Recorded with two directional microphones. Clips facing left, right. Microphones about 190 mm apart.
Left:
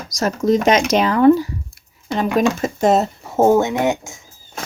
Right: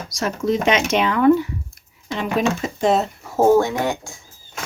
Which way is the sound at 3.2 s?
20° left (ahead or behind).